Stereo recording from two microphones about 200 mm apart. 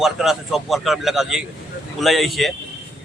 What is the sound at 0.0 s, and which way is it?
A man's voice, centre (ahead or behind).